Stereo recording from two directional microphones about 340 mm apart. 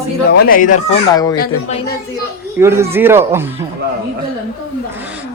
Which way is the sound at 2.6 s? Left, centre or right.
Centre.